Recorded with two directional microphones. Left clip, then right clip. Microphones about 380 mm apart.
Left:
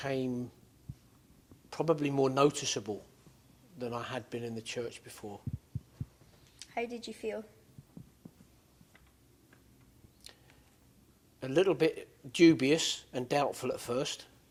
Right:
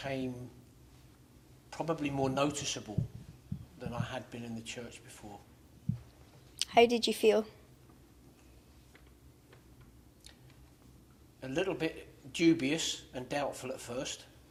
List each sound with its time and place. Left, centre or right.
0.0 s speech: centre
1.7 s speech: centre
6.6 s a woman's voice: right
11.3 s speech: centre